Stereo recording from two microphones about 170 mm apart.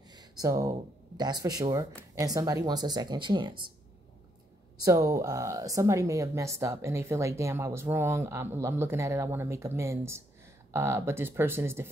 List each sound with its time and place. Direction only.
0.1 s speech: 20° right (ahead or behind)
4.8 s speech: 20° right (ahead or behind)